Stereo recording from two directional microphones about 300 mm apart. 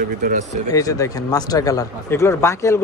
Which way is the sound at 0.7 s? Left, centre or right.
Centre.